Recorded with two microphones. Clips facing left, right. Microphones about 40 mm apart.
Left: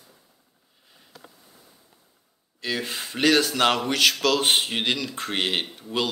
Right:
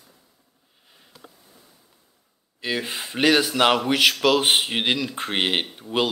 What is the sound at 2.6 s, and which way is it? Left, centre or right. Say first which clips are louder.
Speech: right 2 dB; centre.